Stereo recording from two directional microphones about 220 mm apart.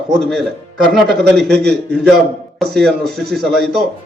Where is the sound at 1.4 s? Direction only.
5° left (ahead or behind).